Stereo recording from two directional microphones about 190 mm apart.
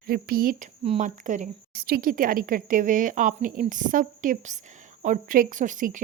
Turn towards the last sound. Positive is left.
turn(degrees=-45)  # may be behind; listen again after turning